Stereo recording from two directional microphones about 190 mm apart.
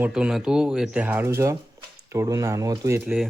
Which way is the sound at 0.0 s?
5° right (ahead or behind).